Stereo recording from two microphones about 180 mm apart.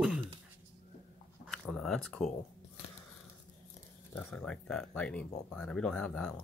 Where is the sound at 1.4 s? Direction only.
Centre (ahead or behind).